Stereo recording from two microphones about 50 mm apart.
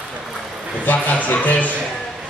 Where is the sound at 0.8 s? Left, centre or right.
Left.